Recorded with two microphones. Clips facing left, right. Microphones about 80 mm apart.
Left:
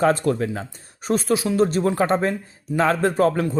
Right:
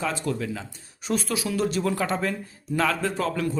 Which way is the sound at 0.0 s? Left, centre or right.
Left.